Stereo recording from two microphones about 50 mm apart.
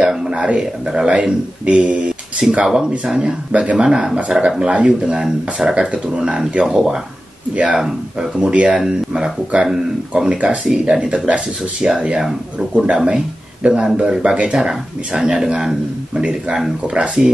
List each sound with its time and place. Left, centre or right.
0.3 s speech: right
5.8 s speech: right
10.3 s speech: right